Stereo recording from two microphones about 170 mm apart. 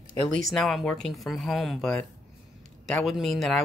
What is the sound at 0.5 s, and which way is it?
Speech, centre (ahead or behind).